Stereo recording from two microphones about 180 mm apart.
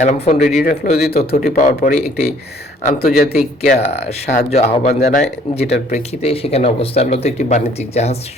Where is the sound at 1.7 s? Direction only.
50° left (ahead or behind).